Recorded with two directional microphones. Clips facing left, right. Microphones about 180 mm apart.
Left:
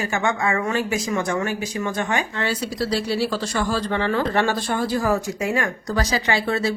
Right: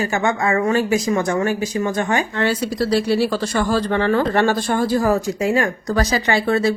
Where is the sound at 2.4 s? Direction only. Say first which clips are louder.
Right 5 dB; 55° right (ahead or behind); by 5.7 s 35° right (ahead or behind).